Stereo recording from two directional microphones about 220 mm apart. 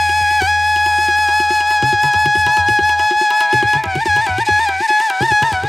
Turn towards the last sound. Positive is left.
turn(degrees=0)  # may be behind; listen again after turning